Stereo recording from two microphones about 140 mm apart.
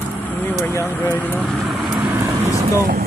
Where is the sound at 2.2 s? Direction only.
20° right (ahead or behind).